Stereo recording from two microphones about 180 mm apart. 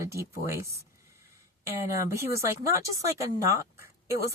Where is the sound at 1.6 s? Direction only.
15° right (ahead or behind).